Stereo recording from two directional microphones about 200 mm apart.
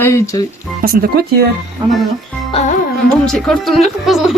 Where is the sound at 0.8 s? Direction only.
50° right (ahead or behind).